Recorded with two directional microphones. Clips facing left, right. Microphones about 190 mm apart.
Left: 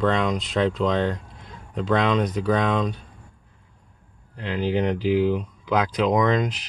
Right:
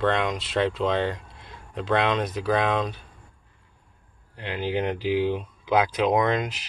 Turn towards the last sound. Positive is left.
turn(degrees=-5)  # may be behind; listen again after turning